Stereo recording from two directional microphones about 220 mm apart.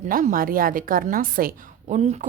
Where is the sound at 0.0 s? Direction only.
40° right (ahead or behind).